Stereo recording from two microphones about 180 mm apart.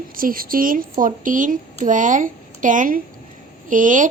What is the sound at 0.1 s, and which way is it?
Speech, 50° right (ahead or behind).